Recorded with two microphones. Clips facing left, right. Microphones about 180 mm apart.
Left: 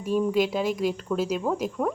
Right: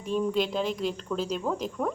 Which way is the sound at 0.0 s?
10° left (ahead or behind).